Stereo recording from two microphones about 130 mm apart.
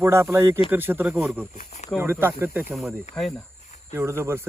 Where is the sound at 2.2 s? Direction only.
15° right (ahead or behind).